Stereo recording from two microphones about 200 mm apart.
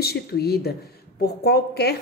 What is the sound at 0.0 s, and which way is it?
Dishes, 50° left (ahead or behind).